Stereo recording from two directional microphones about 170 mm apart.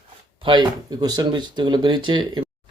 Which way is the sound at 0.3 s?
30° right (ahead or behind).